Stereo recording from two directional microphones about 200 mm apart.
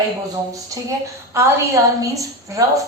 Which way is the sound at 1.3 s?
15° right (ahead or behind).